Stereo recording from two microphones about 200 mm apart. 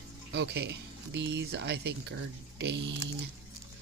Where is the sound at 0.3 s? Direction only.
60° right (ahead or behind).